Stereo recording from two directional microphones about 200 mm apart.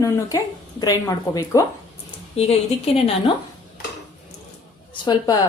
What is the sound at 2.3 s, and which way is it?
Speech, 30° left (ahead or behind).